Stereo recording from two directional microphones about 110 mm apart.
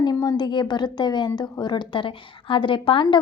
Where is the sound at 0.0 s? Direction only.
35° left (ahead or behind).